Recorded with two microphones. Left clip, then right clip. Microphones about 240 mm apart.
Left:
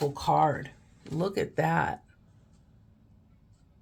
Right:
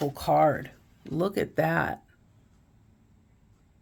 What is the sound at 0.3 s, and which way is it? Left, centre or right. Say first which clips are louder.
Speech: right 5 dB; right.